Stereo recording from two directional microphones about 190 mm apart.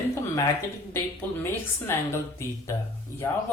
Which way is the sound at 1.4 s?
15° left (ahead or behind).